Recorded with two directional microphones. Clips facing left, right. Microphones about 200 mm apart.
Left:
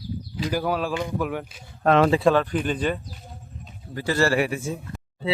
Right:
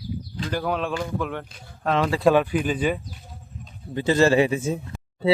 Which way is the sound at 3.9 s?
20° right (ahead or behind).